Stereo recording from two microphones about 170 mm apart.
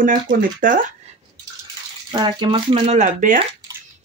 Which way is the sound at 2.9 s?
45° right (ahead or behind).